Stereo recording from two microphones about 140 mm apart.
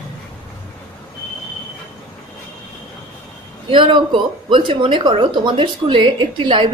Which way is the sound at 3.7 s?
40° right (ahead or behind).